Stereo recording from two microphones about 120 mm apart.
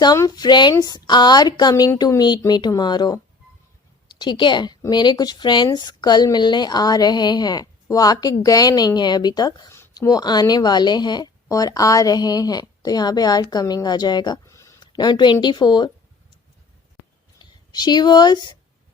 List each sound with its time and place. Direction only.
0.2 s a woman's voice: 35° left (ahead or behind)
14.8 s speech: 35° left (ahead or behind)
17.4 s speech: 35° left (ahead or behind)